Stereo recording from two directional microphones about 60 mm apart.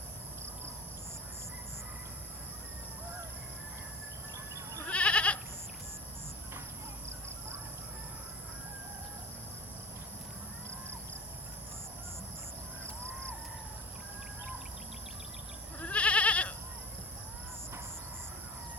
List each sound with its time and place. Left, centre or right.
4.9 s goat: centre
15.8 s goat: left